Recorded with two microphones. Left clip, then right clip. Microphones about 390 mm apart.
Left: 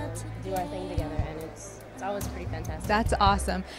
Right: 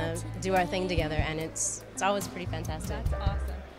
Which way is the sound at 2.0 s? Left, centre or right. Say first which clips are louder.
Right 5 dB; right.